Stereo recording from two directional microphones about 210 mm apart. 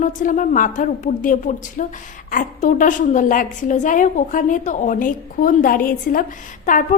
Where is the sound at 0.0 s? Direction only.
40° left (ahead or behind).